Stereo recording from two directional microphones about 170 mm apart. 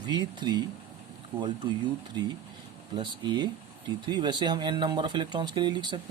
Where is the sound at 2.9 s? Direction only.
30° right (ahead or behind).